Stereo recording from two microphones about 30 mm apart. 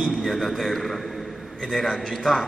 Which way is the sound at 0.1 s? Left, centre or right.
Centre.